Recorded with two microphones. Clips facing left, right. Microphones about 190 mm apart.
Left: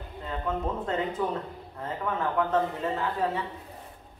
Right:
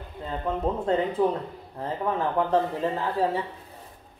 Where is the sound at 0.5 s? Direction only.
35° right (ahead or behind).